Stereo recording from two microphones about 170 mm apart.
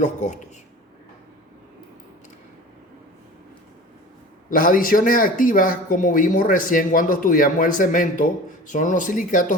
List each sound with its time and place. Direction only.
0.0 s speech: 45° left (ahead or behind)
4.4 s speech: 55° left (ahead or behind)